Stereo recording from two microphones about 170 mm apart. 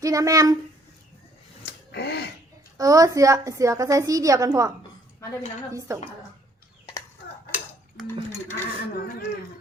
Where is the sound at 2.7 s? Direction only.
20° right (ahead or behind).